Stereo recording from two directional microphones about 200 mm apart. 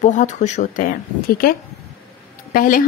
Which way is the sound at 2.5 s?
45° left (ahead or behind).